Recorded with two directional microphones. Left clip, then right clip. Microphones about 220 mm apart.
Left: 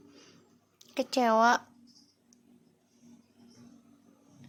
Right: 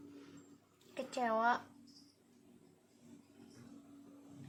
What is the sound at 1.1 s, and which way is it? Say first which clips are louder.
Speech: left 10 dB; 45° left (ahead or behind).